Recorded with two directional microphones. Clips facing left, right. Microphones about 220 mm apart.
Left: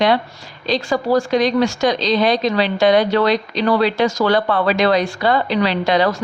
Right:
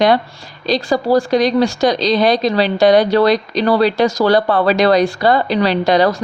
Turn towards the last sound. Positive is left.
turn(degrees=-40)  # may be behind; listen again after turning